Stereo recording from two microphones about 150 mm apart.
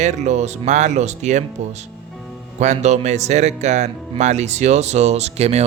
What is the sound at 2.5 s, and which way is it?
Speech, 50° right (ahead or behind).